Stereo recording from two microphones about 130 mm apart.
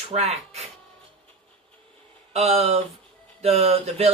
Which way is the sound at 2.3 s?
55° right (ahead or behind).